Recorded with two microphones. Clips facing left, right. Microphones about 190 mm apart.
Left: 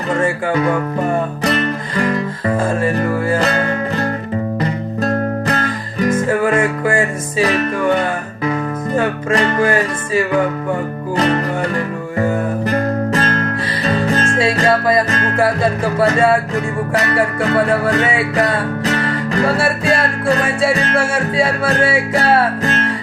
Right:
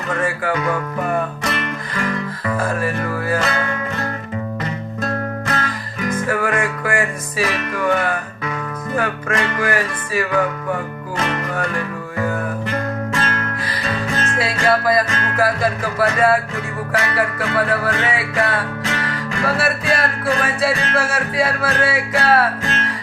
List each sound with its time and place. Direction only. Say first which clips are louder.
0.1 s music: left 4 dB; 25° left (ahead or behind)
1.5 s music: left 6 dB; 35° left (ahead or behind)
6.2 s music: left 2 dB; 25° left (ahead or behind)
12.6 s music: left 6 dB; 35° left (ahead or behind)